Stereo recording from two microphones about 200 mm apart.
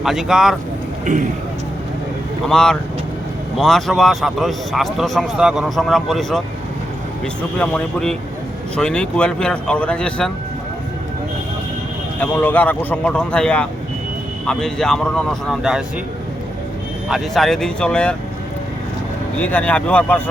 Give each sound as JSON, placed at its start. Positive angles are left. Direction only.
{"t": 0.0, "sound": "a man's voice", "side_deg": 0}
{"t": 1.1, "sound": "speech", "side_deg": -40}
{"t": 2.5, "sound": "a man's voice", "side_deg": 5}
{"t": 7.6, "sound": "a man's voice", "side_deg": 5}
{"t": 12.2, "sound": "a man's voice", "side_deg": 10}
{"t": 17.1, "sound": "a man's voice", "side_deg": 0}
{"t": 19.4, "sound": "speech", "side_deg": 10}